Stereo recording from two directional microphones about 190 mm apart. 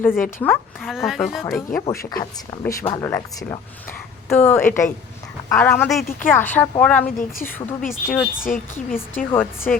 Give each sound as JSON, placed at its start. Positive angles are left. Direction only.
{"t": 0.1, "sound": "a woman's voice", "side_deg": 45}
{"t": 0.4, "sound": "speech", "side_deg": 5}
{"t": 1.9, "sound": "speech", "side_deg": 20}
{"t": 7.2, "sound": "a woman's voice", "side_deg": 45}
{"t": 7.9, "sound": "speech", "side_deg": 0}
{"t": 9.2, "sound": "a woman's voice", "side_deg": 45}
{"t": 9.7, "sound": "speech", "side_deg": 5}